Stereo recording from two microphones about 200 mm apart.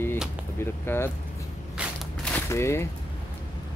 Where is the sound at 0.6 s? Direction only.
10° left (ahead or behind).